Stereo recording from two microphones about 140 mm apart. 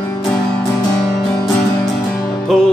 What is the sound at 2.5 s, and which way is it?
Music, centre (ahead or behind).